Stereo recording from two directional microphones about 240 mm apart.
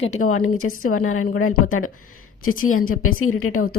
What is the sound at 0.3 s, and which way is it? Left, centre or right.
A woman's voice, left.